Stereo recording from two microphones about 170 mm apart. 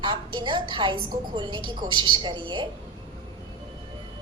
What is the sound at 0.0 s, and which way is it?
A woman's voice, 25° right (ahead or behind).